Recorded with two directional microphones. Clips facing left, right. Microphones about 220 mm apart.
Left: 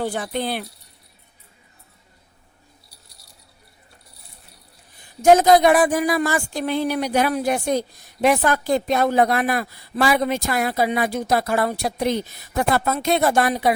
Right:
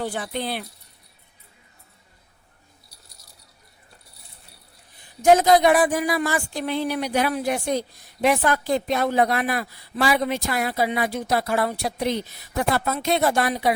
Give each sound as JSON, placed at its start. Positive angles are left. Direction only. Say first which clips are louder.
{"t": 0.0, "sound": "speech", "louder": "left 3 dB", "side_deg": 45}
{"t": 5.2, "sound": "speech", "louder": "left 2 dB", "side_deg": 45}